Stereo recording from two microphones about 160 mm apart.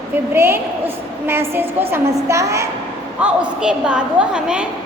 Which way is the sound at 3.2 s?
10° right (ahead or behind).